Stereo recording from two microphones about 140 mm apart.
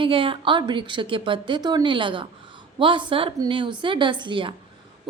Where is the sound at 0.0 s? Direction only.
40° right (ahead or behind).